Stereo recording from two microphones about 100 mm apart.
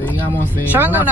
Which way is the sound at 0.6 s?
20° right (ahead or behind).